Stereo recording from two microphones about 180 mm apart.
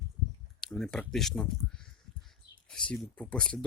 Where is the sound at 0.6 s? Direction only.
5° left (ahead or behind).